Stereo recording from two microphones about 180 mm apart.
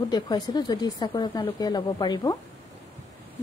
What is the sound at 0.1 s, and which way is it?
A woman's voice, 25° left (ahead or behind).